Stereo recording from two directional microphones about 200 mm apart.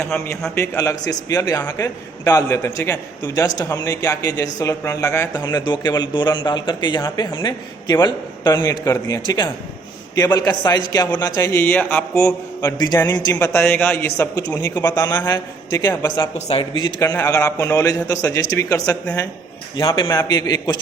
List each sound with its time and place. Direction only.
0.0 s a man's voice: 5° left (ahead or behind)